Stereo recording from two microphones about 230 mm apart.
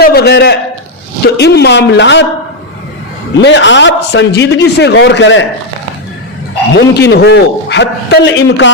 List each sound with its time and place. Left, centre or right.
0.0 s a man's voice: left
3.3 s a man's voice: left
6.7 s a man's voice: left